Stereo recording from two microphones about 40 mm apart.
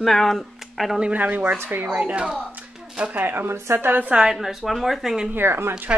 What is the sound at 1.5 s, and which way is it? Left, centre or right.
Speech, right.